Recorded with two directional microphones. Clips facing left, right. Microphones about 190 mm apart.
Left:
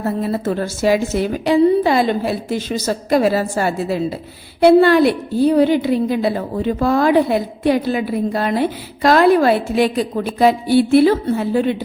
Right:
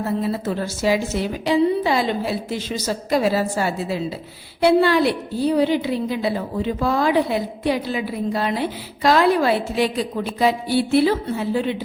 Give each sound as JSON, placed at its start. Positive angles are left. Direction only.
{"t": 0.2, "sound": "a woman's voice", "side_deg": 50}